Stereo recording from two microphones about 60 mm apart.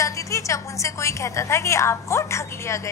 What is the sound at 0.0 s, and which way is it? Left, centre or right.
A woman's voice, left.